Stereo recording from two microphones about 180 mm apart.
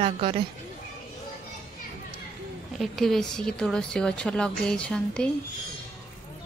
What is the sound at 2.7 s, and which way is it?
A woman's voice, centre (ahead or behind).